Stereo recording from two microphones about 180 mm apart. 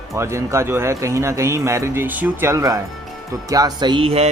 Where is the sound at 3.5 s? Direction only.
20° right (ahead or behind).